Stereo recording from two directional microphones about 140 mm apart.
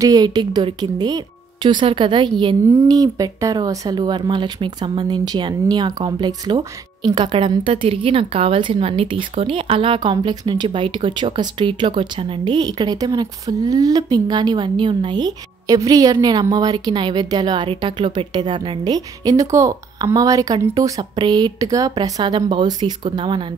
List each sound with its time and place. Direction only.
0.0 s speech: 25° right (ahead or behind)
2.7 s speech: 25° right (ahead or behind)